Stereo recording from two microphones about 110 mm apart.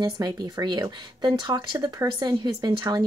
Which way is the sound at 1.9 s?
40° right (ahead or behind).